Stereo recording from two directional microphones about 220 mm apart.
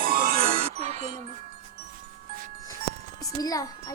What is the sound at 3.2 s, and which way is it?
Music, 15° left (ahead or behind).